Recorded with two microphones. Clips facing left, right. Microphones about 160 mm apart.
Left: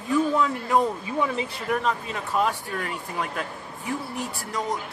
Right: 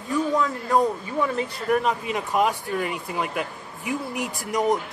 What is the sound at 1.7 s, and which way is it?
Speech, 10° right (ahead or behind).